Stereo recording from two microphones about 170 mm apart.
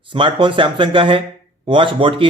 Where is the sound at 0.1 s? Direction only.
30° right (ahead or behind).